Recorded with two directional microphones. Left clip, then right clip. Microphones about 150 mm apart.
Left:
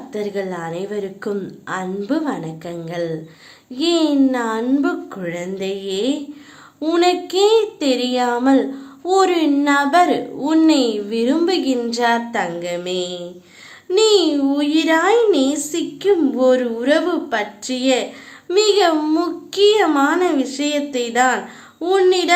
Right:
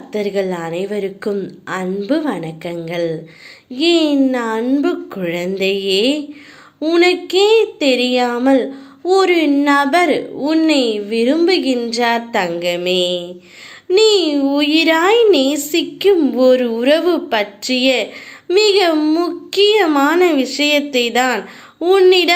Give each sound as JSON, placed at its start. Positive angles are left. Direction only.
{"t": 0.1, "sound": "a child's voice", "side_deg": -20}
{"t": 5.2, "sound": "speech", "side_deg": -25}
{"t": 6.7, "sound": "a child's voice", "side_deg": -5}